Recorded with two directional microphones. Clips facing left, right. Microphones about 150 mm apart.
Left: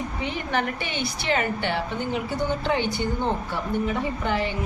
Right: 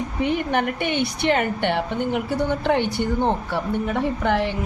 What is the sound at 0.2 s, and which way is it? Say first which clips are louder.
A woman's voice: right 6 dB; 55° right (ahead or behind).